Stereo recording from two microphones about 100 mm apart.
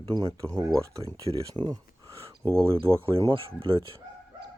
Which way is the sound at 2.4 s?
40° right (ahead or behind).